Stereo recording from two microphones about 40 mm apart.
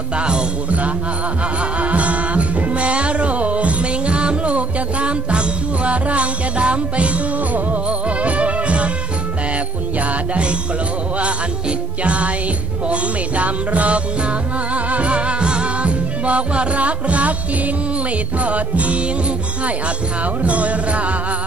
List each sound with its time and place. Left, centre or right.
0.1 s music: right
0.7 s music: right
9.9 s music: right
12.0 s music: right
18.4 s music: right